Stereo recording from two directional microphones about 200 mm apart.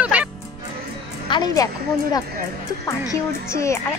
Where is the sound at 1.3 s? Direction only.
20° left (ahead or behind).